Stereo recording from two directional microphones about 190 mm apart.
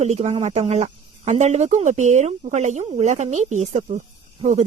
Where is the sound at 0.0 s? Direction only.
35° right (ahead or behind).